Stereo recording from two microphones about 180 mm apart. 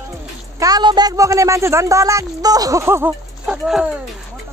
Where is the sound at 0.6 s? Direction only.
20° right (ahead or behind); by 3.9 s 5° right (ahead or behind).